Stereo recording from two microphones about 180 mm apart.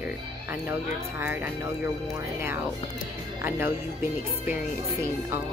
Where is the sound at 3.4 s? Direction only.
15° right (ahead or behind).